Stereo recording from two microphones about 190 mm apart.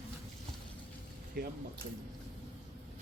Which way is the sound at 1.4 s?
50° right (ahead or behind).